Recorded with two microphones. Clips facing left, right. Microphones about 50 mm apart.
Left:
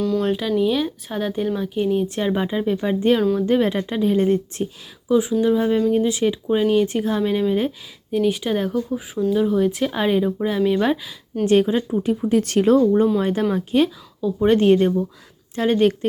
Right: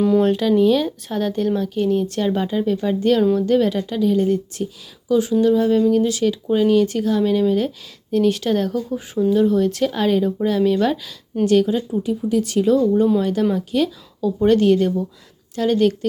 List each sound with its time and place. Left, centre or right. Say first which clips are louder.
0.2 s speech: right 4 dB; centre; by 5.1 s left
5.4 s speech: right 2 dB; centre
8.1 s speech: right 2 dB; centre; by 12.0 s left
12.0 s speech: left 1 dB; left
14.2 s a woman's voice: right 2 dB; centre
14.4 s speech: even; left